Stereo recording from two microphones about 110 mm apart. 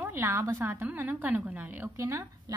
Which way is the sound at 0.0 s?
20° right (ahead or behind).